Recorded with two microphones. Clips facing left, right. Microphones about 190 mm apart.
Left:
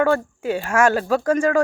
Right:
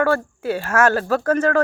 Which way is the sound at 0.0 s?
15° left (ahead or behind).